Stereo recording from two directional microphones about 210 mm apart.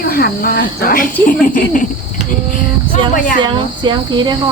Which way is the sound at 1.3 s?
40° left (ahead or behind).